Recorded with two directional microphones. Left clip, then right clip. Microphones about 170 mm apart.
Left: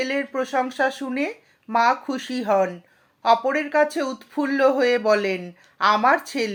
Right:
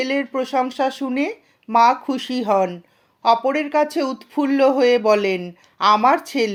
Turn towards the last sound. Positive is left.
turn(degrees=-35)  # may be behind; listen again after turning